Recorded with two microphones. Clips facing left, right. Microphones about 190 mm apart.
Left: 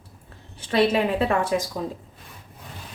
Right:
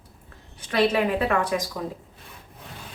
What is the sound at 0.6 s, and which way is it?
Speech, 25° left (ahead or behind).